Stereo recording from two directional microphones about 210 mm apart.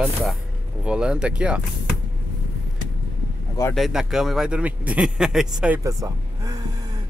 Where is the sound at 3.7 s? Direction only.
Centre (ahead or behind).